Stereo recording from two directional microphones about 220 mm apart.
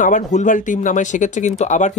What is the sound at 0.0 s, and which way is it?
Speech, 35° left (ahead or behind).